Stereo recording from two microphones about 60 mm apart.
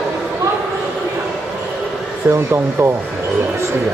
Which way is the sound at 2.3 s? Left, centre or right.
Right.